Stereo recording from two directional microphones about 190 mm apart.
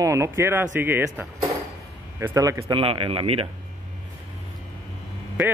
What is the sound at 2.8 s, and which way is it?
Speech, 30° right (ahead or behind).